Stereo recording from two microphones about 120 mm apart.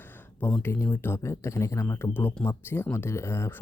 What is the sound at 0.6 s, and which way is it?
Speech, 20° left (ahead or behind).